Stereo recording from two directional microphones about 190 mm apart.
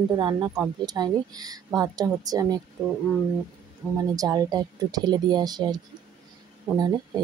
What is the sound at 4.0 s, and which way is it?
Speech, 20° right (ahead or behind).